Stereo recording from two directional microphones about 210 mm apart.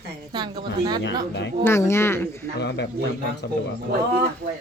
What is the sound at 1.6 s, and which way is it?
Speech, 10° left (ahead or behind).